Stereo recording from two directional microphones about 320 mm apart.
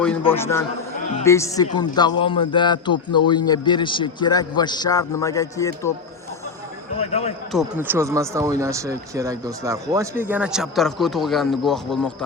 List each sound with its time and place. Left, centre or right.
0.2 s a man's voice: centre
7.0 s speech: centre
7.5 s a man's voice: centre